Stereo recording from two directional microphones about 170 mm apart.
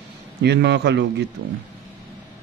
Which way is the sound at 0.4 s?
80° right.